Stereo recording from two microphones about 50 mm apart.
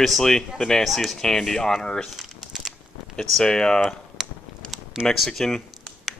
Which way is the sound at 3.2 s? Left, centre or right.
Centre.